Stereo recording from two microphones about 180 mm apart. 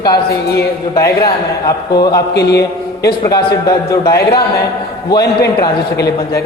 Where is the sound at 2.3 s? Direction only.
65° left (ahead or behind).